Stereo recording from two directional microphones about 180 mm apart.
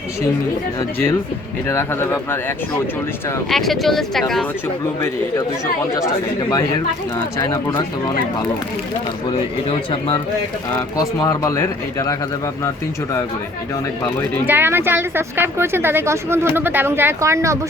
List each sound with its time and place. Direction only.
1.6 s speech: 15° left (ahead or behind)
3.5 s speech: centre (ahead or behind)
7.3 s speech: 15° left (ahead or behind)
9.6 s speech: 30° left (ahead or behind)
11.2 s speech: 20° left (ahead or behind)
14.4 s a woman's voice: 10° right (ahead or behind)